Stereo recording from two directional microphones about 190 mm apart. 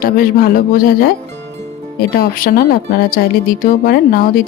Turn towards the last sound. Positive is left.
turn(degrees=50)  # may be behind; listen again after turning